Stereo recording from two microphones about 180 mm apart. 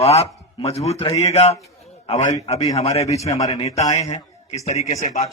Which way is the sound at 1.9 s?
35° left (ahead or behind).